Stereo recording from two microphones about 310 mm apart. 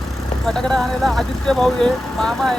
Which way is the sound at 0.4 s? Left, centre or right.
Centre.